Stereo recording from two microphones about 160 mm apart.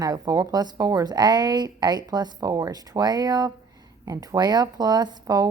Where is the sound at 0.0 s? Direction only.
25° right (ahead or behind).